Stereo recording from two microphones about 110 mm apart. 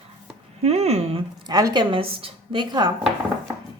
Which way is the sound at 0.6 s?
70° right (ahead or behind).